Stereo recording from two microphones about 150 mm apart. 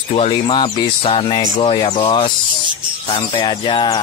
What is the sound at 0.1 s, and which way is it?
Speech, 40° left (ahead or behind).